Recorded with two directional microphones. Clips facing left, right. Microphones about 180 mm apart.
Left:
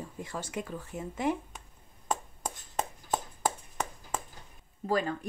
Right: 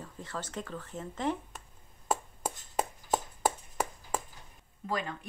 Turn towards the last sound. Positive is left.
turn(degrees=40)  # may be behind; listen again after turning